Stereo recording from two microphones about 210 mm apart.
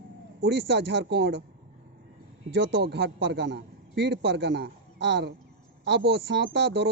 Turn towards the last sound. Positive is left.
turn(degrees=-55)  # may be behind; listen again after turning